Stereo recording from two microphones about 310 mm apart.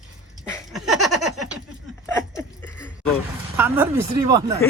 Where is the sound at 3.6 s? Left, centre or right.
Centre.